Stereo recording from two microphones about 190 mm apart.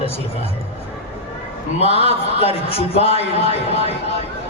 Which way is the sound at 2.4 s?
30° left (ahead or behind).